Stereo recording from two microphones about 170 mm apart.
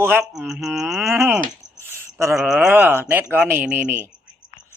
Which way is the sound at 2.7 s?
10° right (ahead or behind).